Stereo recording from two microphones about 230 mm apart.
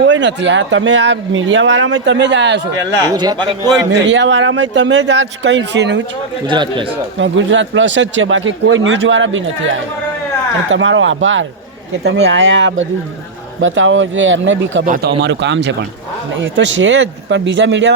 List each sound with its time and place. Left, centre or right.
0.1 s speech: right
3.1 s a man's voice: centre
4.1 s speech: right
6.5 s a man's voice: centre
7.2 s speech: right
10.7 s speech: right
14.8 s speech: right
15.2 s speech: right